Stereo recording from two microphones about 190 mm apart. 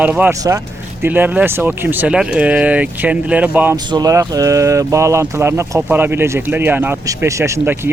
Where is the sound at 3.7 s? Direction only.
20° right (ahead or behind).